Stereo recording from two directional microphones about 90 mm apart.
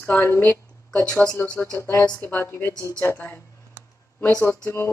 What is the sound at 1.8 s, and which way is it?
Speech, 25° left (ahead or behind).